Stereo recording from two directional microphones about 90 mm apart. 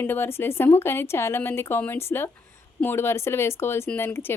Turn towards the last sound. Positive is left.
turn(degrees=25)  # may be behind; listen again after turning